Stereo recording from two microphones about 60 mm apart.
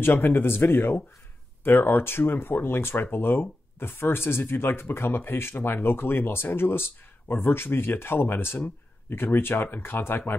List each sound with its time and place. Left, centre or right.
0.0 s speech: left